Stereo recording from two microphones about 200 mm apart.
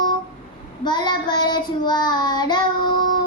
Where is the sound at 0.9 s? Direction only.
20° left (ahead or behind).